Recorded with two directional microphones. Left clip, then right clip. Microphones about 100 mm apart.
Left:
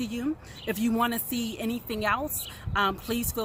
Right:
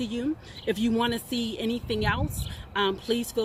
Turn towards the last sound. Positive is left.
turn(degrees=45)  # may be behind; listen again after turning